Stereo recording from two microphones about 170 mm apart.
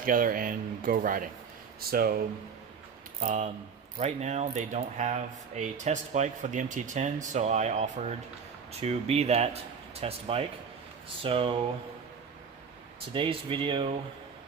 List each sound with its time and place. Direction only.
0.0 s speech: 55° right (ahead or behind)
3.2 s speech: 45° right (ahead or behind); by 11.5 s 30° right (ahead or behind)
13.1 s speech: 30° right (ahead or behind)